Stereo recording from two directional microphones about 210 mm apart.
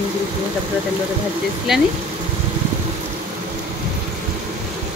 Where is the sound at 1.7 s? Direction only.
Centre (ahead or behind).